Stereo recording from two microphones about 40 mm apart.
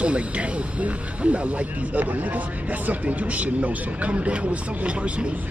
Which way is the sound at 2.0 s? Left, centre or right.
Right.